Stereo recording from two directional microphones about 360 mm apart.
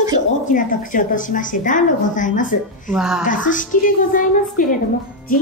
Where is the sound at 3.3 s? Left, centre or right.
Left.